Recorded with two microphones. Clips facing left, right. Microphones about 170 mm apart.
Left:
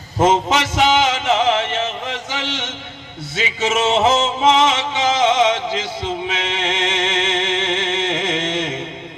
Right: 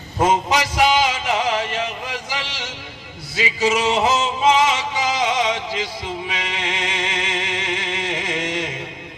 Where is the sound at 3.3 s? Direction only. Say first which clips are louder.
Right 1 dB; 25° left (ahead or behind).